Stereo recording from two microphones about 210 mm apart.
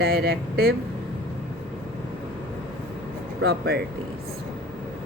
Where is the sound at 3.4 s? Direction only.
50° right (ahead or behind).